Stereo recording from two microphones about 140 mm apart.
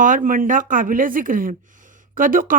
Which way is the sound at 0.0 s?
70° right (ahead or behind).